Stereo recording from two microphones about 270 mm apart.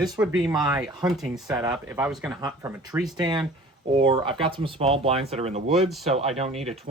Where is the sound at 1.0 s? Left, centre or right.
Centre.